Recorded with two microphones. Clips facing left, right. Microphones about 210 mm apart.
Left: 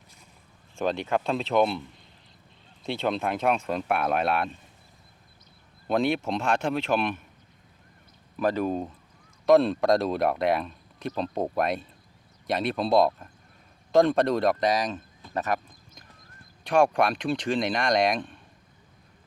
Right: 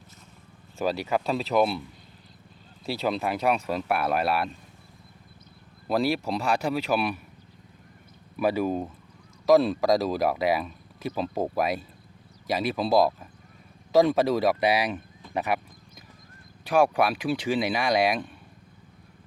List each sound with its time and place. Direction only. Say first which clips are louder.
0.8 s speech: even; 5° right (ahead or behind)
2.8 s speech: even; 5° right (ahead or behind)
5.9 s speech: even; 5° right (ahead or behind)
8.4 s speech: right 1 dB; 10° right (ahead or behind)